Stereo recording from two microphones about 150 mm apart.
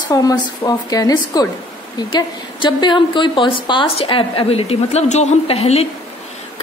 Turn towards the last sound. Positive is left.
turn(degrees=45)  # may be behind; listen again after turning